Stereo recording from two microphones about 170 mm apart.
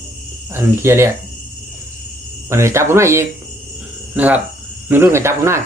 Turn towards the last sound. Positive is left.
turn(degrees=-15)  # may be behind; listen again after turning